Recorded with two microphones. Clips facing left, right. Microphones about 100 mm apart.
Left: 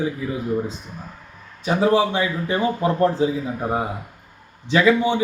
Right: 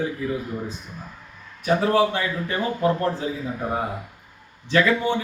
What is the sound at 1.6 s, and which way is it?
Speech, 20° left (ahead or behind).